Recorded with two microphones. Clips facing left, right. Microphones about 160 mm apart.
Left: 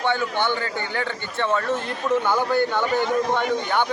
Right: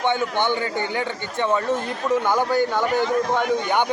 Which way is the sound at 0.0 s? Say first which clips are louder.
Right 1 dB; 20° right (ahead or behind).